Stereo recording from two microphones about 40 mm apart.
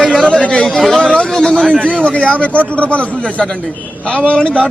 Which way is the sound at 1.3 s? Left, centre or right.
Centre.